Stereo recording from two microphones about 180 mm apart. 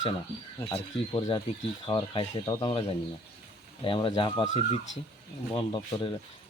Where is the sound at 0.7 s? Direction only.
30° left (ahead or behind).